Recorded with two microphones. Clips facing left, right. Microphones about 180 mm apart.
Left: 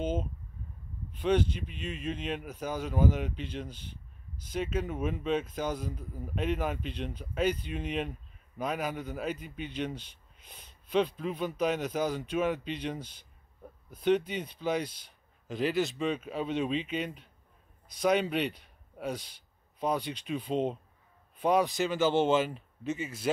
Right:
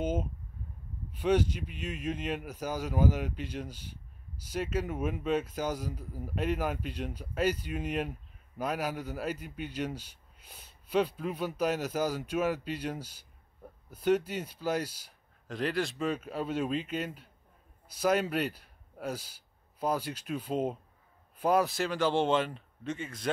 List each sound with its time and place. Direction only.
0.0 s a man's voice: 10° right (ahead or behind); by 23.3 s 5° left (ahead or behind)